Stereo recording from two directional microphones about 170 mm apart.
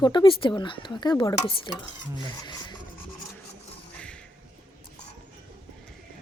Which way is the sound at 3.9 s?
5° left (ahead or behind).